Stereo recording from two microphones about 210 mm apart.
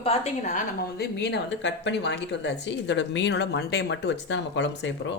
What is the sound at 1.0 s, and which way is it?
Speech, 55° left (ahead or behind).